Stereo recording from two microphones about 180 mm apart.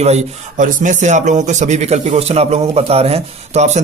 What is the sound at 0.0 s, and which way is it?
Speech, 35° right (ahead or behind).